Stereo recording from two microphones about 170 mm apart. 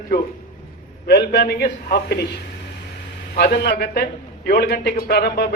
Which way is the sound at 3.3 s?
70° left (ahead or behind).